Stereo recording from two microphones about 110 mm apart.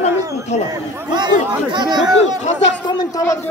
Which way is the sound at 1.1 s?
40° right (ahead or behind).